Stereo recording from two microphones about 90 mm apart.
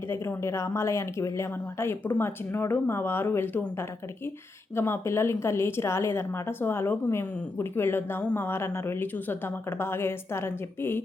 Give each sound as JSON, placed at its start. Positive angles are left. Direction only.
{"t": 0.1, "sound": "a woman's voice", "side_deg": 30}
{"t": 4.7, "sound": "a woman's voice", "side_deg": 30}